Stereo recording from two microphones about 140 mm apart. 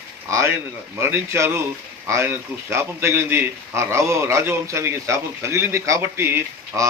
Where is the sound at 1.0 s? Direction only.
20° right (ahead or behind).